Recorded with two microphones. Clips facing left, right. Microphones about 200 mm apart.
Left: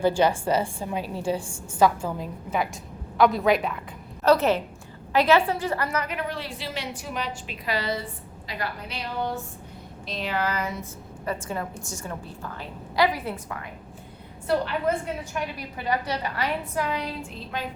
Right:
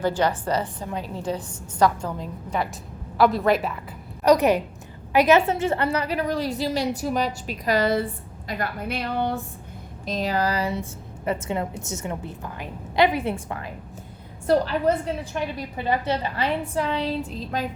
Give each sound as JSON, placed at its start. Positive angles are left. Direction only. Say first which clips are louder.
{"t": 0.0, "sound": "a woman's voice", "louder": "left 2 dB", "side_deg": 10}
{"t": 4.2, "sound": "a woman's voice", "louder": "right 2 dB", "side_deg": -15}
{"t": 10.1, "sound": "a woman's voice", "louder": "right 4 dB", "side_deg": -40}
{"t": 13.1, "sound": "a woman's voice", "louder": "right 6 dB", "side_deg": -30}
{"t": 14.4, "sound": "a woman's voice", "louder": "right 4 dB", "side_deg": -40}
{"t": 17.5, "sound": "a woman's voice", "louder": "right 4 dB", "side_deg": -40}